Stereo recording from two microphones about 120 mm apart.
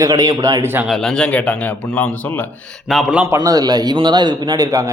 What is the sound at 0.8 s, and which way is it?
A man's voice, 5° left (ahead or behind).